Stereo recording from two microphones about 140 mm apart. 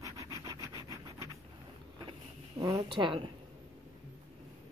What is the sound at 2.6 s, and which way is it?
Speech, 30° right (ahead or behind).